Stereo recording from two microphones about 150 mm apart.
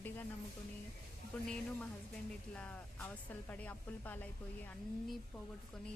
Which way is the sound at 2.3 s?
10° left (ahead or behind).